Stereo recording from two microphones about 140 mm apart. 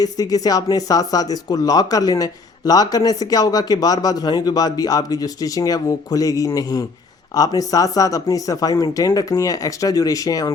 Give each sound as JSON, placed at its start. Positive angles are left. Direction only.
{"t": 0.0, "sound": "speech", "side_deg": 25}